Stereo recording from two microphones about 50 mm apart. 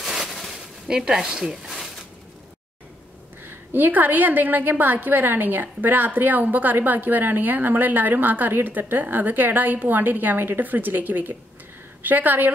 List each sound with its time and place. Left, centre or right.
0.0 s a sound: centre
0.8 s speech: centre
3.4 s a woman's voice: right